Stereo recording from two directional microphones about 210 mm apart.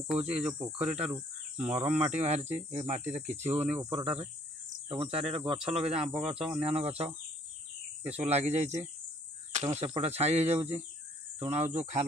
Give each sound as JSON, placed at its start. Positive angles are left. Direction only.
{"t": 0.0, "sound": "cricket", "side_deg": -30}
{"t": 1.7, "sound": "speech", "side_deg": -30}
{"t": 3.9, "sound": "cricket", "side_deg": -30}
{"t": 8.0, "sound": "speech", "side_deg": -30}